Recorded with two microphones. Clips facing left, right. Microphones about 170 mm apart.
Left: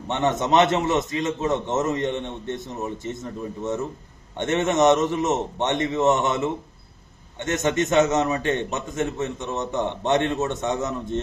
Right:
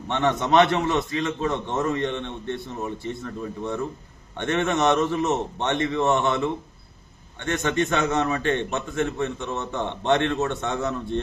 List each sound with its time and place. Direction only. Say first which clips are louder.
0.1 s a man's voice: even; 20° left (ahead or behind)